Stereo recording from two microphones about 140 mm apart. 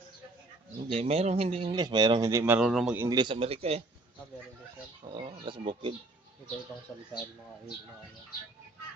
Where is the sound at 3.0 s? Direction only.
30° right (ahead or behind).